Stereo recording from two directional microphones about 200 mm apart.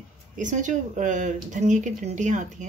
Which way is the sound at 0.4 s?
40° right (ahead or behind).